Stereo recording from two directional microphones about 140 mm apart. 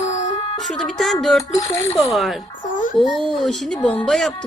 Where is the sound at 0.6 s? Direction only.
5° left (ahead or behind).